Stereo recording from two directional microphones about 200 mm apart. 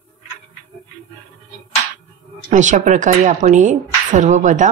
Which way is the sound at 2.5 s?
40° right (ahead or behind).